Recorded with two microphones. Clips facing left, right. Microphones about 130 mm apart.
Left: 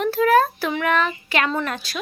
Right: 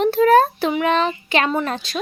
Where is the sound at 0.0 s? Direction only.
25° right (ahead or behind).